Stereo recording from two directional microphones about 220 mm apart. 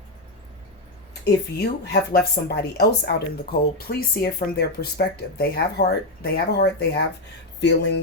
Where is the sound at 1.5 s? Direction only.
45° left (ahead or behind).